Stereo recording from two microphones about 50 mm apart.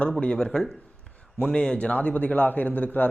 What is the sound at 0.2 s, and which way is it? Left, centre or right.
A man's voice, centre.